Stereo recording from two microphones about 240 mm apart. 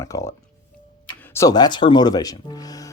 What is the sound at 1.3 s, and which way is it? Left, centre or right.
Speech, centre.